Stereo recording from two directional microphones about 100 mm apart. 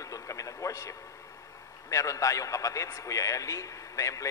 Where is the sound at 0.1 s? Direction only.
30° left (ahead or behind).